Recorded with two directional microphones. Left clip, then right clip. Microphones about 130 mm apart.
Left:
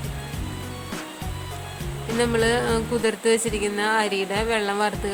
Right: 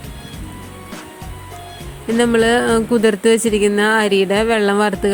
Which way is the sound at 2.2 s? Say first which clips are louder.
Right 7 dB; 50° right (ahead or behind).